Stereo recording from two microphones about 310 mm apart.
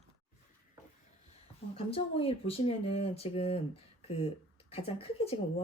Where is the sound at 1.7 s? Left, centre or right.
Centre.